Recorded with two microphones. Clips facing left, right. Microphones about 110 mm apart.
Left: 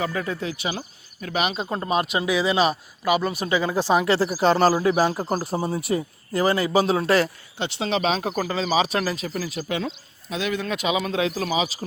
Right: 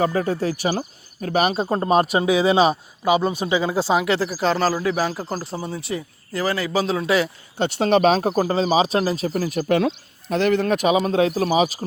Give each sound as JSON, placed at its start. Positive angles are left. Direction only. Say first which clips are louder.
{"t": 0.0, "sound": "speech", "louder": "right 6 dB", "side_deg": -35}
{"t": 3.4, "sound": "speech", "louder": "right 2 dB", "side_deg": -15}
{"t": 4.1, "sound": "speech", "louder": "left 1 dB", "side_deg": 5}
{"t": 5.5, "sound": "speech", "louder": "left 4 dB", "side_deg": 30}
{"t": 6.7, "sound": "speech", "louder": "even", "side_deg": 0}
{"t": 7.6, "sound": "speech", "louder": "right 7 dB", "side_deg": -50}
{"t": 8.3, "sound": "speech", "louder": "right 5 dB", "side_deg": -35}